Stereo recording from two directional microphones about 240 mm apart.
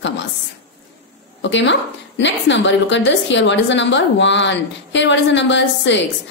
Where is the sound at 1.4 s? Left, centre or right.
Left.